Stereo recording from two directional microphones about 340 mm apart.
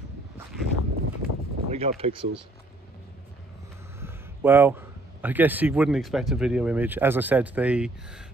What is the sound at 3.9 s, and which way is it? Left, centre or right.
A man's voice, centre.